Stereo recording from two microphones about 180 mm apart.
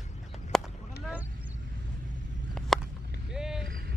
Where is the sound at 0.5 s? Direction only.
Centre (ahead or behind).